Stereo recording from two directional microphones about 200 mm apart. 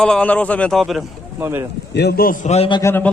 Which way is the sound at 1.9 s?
55° left (ahead or behind).